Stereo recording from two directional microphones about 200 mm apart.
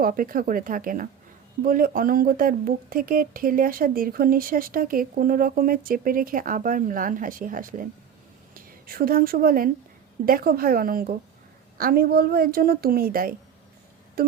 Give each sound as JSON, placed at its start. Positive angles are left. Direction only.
{"t": 0.0, "sound": "a woman's voice", "side_deg": -45}
{"t": 14.2, "sound": "music", "side_deg": -50}